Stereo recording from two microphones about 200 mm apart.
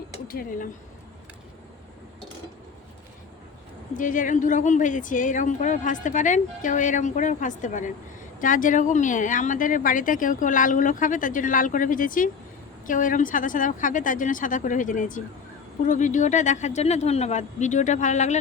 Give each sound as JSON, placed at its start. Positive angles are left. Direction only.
{"t": 0.3, "sound": "speech", "side_deg": 45}
{"t": 3.9, "sound": "a woman's voice", "side_deg": 40}